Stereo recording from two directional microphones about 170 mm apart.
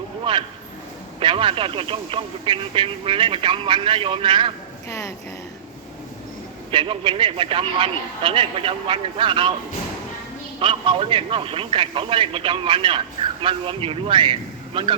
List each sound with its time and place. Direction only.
0.3 s speech: 30° right (ahead or behind)
4.9 s speech: 20° left (ahead or behind)
6.7 s speech: 30° right (ahead or behind)
10.6 s speech: 30° right (ahead or behind)